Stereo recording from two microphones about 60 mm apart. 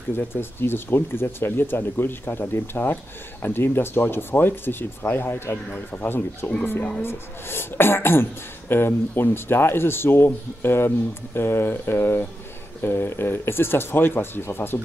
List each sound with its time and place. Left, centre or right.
0.2 s speech: left